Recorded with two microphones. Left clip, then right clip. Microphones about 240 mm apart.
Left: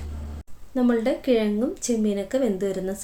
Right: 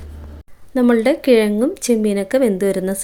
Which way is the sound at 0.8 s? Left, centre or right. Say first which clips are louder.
Right 8 dB; right.